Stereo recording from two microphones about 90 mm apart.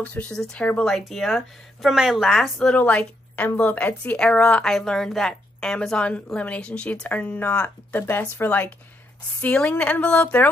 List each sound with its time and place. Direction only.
0.0 s speech: 15° left (ahead or behind)